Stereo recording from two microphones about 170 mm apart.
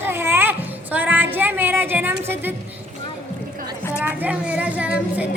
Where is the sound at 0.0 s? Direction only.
15° right (ahead or behind).